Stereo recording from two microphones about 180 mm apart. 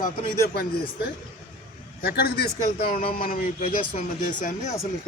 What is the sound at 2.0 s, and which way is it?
Speech, 60° left (ahead or behind).